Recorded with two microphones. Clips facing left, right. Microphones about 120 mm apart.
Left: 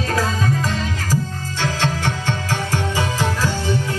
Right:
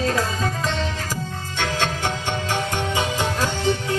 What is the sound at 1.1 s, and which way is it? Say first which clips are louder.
Music: left 6 dB; 20° right (ahead or behind).